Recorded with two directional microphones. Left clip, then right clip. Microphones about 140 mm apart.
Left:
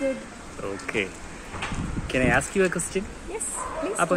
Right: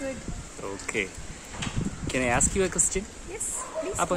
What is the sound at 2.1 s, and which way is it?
Speech, 30° right (ahead or behind).